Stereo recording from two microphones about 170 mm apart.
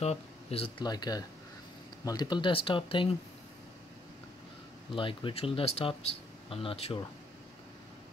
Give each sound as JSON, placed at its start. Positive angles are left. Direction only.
{"t": 0.0, "sound": "speech", "side_deg": 35}
{"t": 4.9, "sound": "speech", "side_deg": 30}